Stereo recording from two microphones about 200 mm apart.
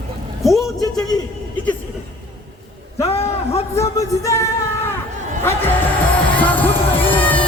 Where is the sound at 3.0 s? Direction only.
30° left (ahead or behind).